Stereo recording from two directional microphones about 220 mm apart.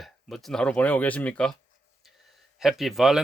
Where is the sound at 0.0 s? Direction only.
Centre (ahead or behind).